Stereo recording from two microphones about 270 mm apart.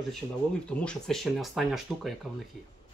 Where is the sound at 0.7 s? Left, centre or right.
Centre.